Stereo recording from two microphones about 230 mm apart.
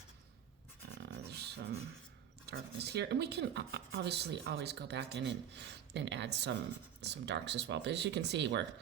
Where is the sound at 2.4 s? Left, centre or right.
Right.